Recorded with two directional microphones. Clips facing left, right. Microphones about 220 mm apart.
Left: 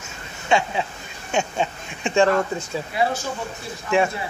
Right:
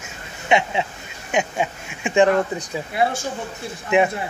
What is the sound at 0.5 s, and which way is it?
Speech, 20° right (ahead or behind).